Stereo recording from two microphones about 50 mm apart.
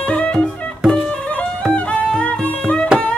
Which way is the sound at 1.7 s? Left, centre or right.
Left.